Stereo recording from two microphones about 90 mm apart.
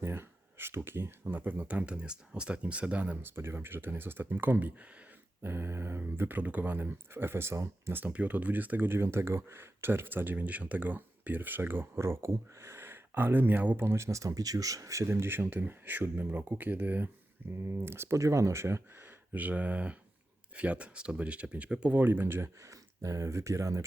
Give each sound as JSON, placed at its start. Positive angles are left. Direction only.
{"t": 0.0, "sound": "speech", "side_deg": -25}
{"t": 8.0, "sound": "speech", "side_deg": -15}